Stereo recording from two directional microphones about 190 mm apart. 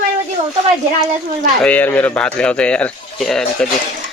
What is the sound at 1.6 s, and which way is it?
Speech, 10° left (ahead or behind).